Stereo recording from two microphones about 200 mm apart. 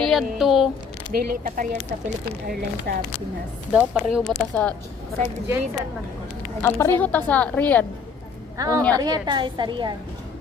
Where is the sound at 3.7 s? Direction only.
5° right (ahead or behind).